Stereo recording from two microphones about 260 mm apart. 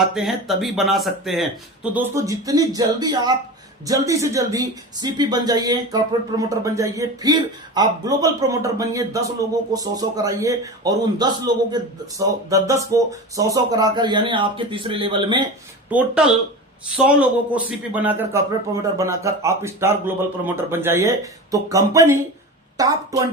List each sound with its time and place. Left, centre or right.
0.0 s a man's voice: centre
15.9 s a man's voice: centre